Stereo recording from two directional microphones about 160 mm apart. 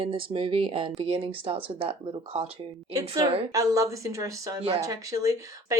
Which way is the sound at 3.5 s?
20° right (ahead or behind).